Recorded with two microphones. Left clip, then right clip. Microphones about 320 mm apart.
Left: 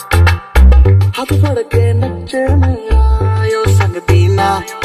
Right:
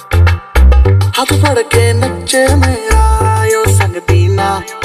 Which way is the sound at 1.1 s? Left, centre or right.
Right.